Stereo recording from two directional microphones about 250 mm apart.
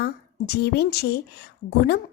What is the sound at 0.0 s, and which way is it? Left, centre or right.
A woman's voice, left.